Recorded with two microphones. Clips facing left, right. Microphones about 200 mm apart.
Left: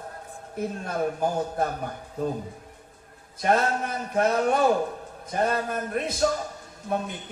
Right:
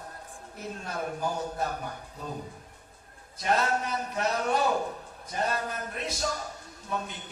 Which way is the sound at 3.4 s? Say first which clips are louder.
Left 4 dB; 50° left (ahead or behind).